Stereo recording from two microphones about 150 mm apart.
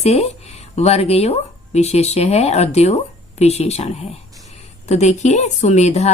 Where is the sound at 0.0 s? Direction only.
45° left (ahead or behind).